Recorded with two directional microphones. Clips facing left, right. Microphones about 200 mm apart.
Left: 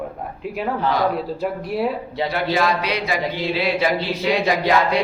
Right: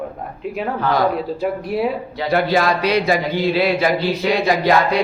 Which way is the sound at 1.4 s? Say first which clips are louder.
Right 2 dB; centre (ahead or behind).